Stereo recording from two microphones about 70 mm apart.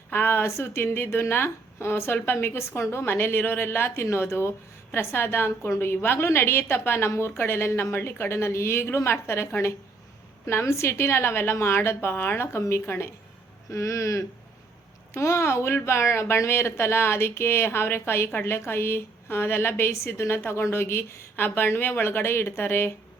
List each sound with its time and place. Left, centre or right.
0.1 s a woman's voice: left